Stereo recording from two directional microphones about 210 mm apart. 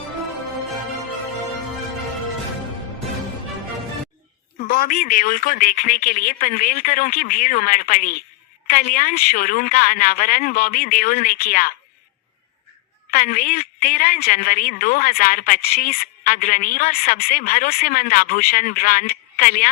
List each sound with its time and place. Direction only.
4.7 s speech: 40° left (ahead or behind)
13.1 s a woman's voice: 40° left (ahead or behind)